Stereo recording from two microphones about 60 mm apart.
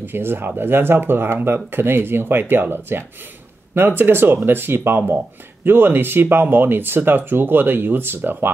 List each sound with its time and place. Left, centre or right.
0.0 s speech: right